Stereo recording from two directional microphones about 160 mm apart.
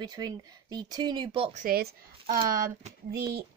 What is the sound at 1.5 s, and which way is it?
Speech, 60° right (ahead or behind).